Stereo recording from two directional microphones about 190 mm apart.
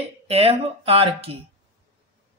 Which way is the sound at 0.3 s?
30° right (ahead or behind).